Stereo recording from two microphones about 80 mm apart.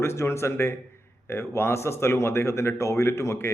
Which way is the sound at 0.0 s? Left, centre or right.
Left.